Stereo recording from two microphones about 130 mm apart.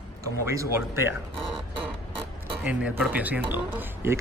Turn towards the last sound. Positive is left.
turn(degrees=-15)  # may be behind; listen again after turning